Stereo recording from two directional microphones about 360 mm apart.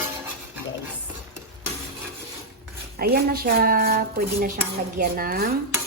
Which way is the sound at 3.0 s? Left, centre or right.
Right.